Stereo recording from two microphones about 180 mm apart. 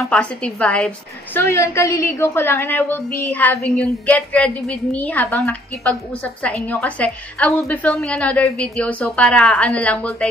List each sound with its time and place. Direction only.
0.1 s a woman's voice: 5° left (ahead or behind)